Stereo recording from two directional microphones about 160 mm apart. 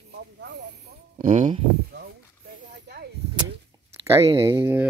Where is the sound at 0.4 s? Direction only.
90° right.